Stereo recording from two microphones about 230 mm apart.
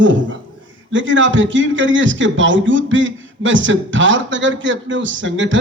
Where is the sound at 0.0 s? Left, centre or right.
Right.